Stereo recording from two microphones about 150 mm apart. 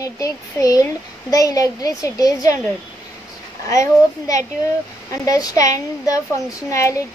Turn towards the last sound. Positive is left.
turn(degrees=20)  # may be behind; listen again after turning